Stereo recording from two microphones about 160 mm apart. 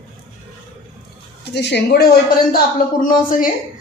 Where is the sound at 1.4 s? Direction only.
90° left; by 2.6 s 75° left (ahead or behind).